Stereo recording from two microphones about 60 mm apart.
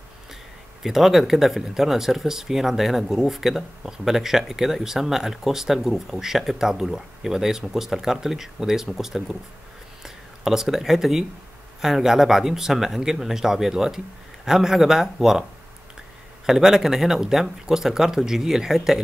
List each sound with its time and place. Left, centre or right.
0.8 s speech: centre
16.4 s speech: centre